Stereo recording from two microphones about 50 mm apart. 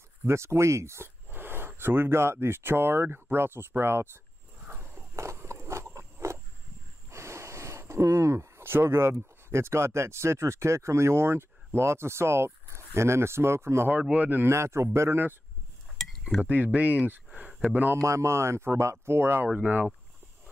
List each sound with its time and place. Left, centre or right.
0.3 s speech: right
1.3 s a sound: right
1.8 s speech: right
4.6 s walk: right
5.1 s biting: right
7.1 s a sound: right
9.5 s speech: right
14.1 s speech: right
14.5 s speech: right
15.0 s speech: right
16.0 s cutlery: centre
16.4 s speech: right
18.0 s speech: right
19.4 s speech: right